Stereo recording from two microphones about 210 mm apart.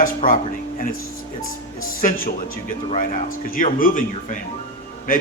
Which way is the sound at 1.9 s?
40° left (ahead or behind).